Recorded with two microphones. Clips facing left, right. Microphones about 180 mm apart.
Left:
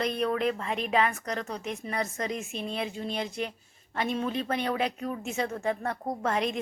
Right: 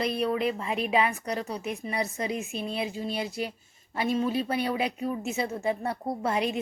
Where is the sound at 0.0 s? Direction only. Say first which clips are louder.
Right 1 dB; 5° right (ahead or behind).